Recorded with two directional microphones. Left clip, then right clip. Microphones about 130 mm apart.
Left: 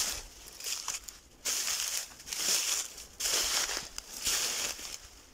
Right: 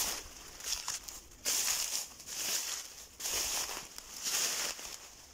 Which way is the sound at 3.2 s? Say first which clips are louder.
Left 6 dB; 5° right (ahead or behind).